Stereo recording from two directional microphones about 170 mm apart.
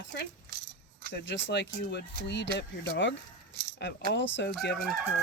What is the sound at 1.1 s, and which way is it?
Speech, 90° left.